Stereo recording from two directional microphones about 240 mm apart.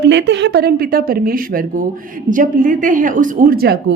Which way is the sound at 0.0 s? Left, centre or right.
Right.